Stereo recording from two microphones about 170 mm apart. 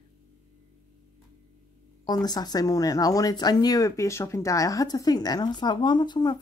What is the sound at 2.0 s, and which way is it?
Speech, 25° left (ahead or behind).